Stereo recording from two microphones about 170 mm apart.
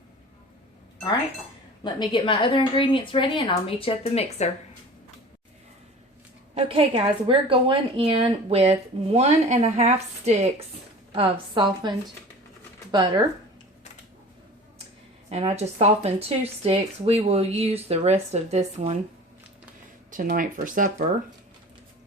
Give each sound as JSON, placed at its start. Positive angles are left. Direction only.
{"t": 1.8, "sound": "a woman's voice", "side_deg": 25}
{"t": 6.5, "sound": "a woman's voice", "side_deg": -35}
{"t": 11.1, "sound": "a woman's voice", "side_deg": -30}
{"t": 15.3, "sound": "a woman's voice", "side_deg": -35}
{"t": 20.1, "sound": "speech", "side_deg": -55}